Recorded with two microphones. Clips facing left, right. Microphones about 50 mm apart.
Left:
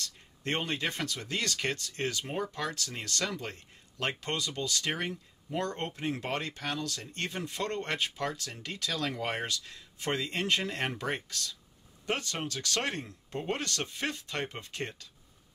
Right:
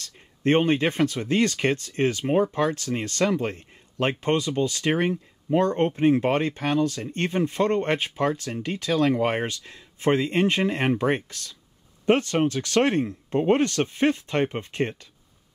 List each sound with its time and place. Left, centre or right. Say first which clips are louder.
0.0 s speech: right 12 dB; right